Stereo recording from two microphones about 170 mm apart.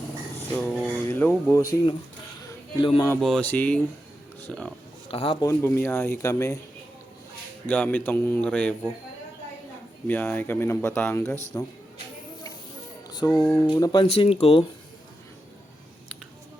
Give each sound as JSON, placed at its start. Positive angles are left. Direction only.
{"t": 0.5, "sound": "a sound", "side_deg": 5}
{"t": 1.0, "sound": "speech", "side_deg": 15}
{"t": 2.7, "sound": "speech", "side_deg": 25}
{"t": 3.2, "sound": "speech", "side_deg": 5}
{"t": 5.0, "sound": "a man's voice", "side_deg": 30}
{"t": 5.4, "sound": "speech", "side_deg": 15}
{"t": 7.7, "sound": "speech", "side_deg": 10}
{"t": 10.1, "sound": "speech", "side_deg": 10}
{"t": 13.1, "sound": "music", "side_deg": 20}
{"t": 13.7, "sound": "speech", "side_deg": 25}